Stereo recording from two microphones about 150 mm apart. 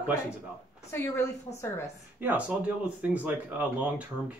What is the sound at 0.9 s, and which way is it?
Speech, 15° left (ahead or behind).